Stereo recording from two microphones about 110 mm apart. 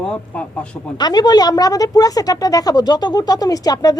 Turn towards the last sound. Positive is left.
turn(degrees=35)  # may be behind; listen again after turning